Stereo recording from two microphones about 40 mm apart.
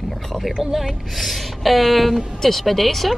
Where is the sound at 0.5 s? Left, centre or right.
Centre.